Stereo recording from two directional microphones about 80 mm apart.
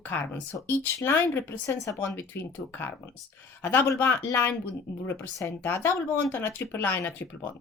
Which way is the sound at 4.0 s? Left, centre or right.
Left.